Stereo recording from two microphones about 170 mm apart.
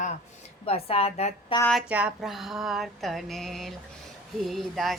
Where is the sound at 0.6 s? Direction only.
35° left (ahead or behind).